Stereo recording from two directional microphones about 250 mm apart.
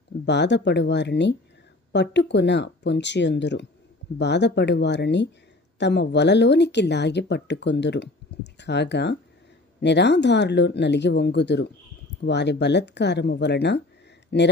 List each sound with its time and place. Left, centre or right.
0.3 s speech: left